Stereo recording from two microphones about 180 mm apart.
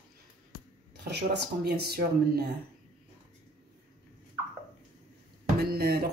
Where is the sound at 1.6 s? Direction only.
60° right (ahead or behind).